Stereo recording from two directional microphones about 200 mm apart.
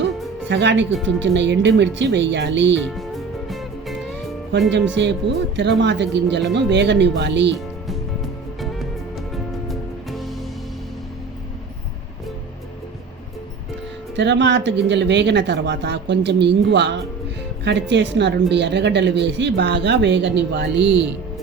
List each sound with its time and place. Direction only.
0.0 s music: 60° right (ahead or behind)
1.0 s a woman's voice: 65° right (ahead or behind)
2.9 s music: centre (ahead or behind)
4.7 s a woman's voice: 60° right (ahead or behind)
8.6 s music: centre (ahead or behind)
14.2 s a woman's voice: 60° right (ahead or behind)